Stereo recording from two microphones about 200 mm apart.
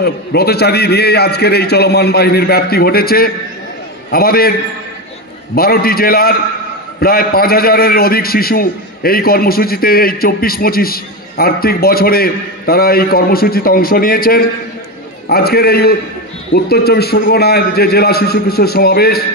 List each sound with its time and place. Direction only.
0.0 s a man's voice: 55° left (ahead or behind)